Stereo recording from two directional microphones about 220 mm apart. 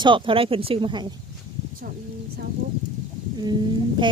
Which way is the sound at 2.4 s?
45° right (ahead or behind).